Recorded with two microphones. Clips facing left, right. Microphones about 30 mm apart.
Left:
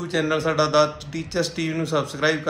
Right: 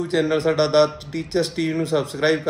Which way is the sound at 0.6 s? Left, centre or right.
Right.